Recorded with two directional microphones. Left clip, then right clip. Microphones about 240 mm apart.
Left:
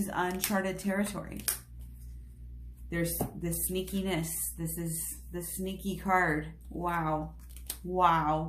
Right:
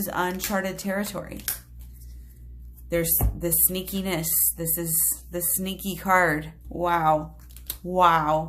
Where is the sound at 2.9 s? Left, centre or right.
Right.